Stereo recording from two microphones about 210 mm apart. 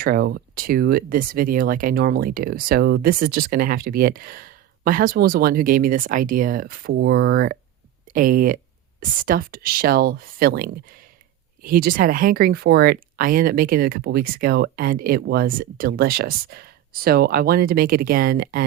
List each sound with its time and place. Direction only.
0.0 s speech: 45° right (ahead or behind)